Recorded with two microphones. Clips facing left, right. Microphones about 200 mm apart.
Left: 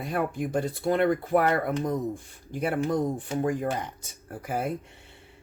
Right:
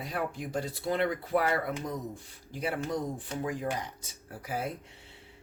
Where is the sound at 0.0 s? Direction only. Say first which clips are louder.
Left 6 dB; 50° left (ahead or behind).